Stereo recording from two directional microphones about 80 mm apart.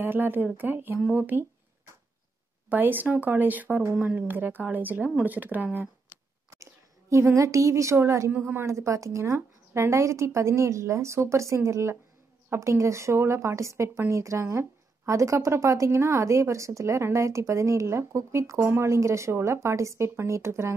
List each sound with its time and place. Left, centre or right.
0.0 s speech: right
2.7 s speech: right
6.6 s a woman's voice: right
8.3 s speech: right
8.6 s speech: right